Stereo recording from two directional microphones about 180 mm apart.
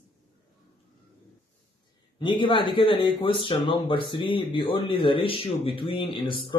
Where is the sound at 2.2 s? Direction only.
25° left (ahead or behind).